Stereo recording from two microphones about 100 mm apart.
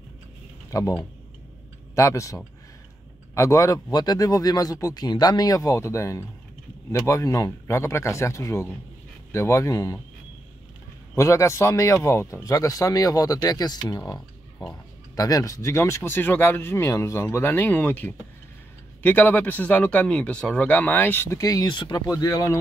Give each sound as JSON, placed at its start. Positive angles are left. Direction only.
{"t": 0.7, "sound": "speech", "side_deg": 35}
{"t": 2.0, "sound": "speech", "side_deg": 30}
{"t": 11.1, "sound": "speech", "side_deg": 30}
{"t": 21.4, "sound": "speech", "side_deg": 35}
{"t": 22.2, "sound": "speech", "side_deg": 35}